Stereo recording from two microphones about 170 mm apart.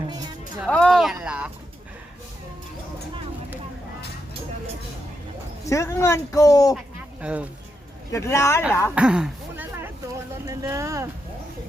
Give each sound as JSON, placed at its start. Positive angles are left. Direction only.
{"t": 0.7, "sound": "speech", "side_deg": 0}
{"t": 1.2, "sound": "a sound", "side_deg": -5}
{"t": 5.6, "sound": "speech", "side_deg": 20}
{"t": 7.2, "sound": "speech", "side_deg": -10}
{"t": 8.1, "sound": "speech", "side_deg": 15}
{"t": 9.0, "sound": "a sound", "side_deg": -5}